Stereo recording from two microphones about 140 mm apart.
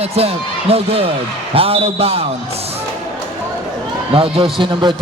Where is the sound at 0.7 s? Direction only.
45° right (ahead or behind).